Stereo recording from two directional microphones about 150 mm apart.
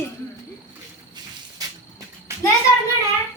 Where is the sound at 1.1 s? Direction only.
25° right (ahead or behind).